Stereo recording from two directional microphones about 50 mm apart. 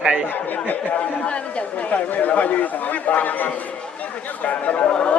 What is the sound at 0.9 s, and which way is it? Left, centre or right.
A man's voice, left.